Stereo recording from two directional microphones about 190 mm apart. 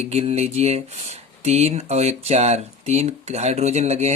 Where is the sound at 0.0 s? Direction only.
35° right (ahead or behind).